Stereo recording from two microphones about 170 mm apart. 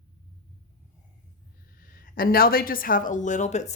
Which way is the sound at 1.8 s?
55° left (ahead or behind).